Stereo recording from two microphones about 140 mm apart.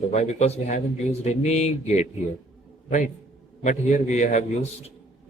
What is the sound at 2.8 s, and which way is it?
A man's voice, 65° left (ahead or behind).